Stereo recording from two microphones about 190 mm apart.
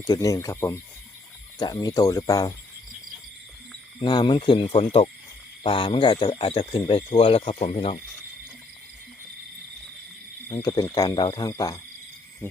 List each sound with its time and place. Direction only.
0.0 s speech: 20° left (ahead or behind)
4.0 s speech: 25° left (ahead or behind)
10.5 s speech: 20° left (ahead or behind)